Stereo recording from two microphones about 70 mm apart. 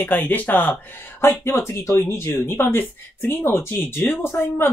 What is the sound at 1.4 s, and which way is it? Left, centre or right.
Speech, left.